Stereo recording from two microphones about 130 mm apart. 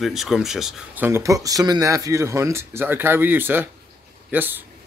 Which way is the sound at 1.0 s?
20° right (ahead or behind).